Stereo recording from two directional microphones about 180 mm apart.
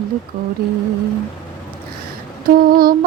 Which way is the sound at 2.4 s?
55° right (ahead or behind).